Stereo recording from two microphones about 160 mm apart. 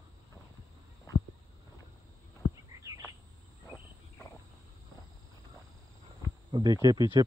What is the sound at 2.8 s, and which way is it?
Cricket, 20° right (ahead or behind).